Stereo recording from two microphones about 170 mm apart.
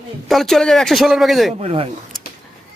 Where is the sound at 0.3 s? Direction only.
Centre (ahead or behind).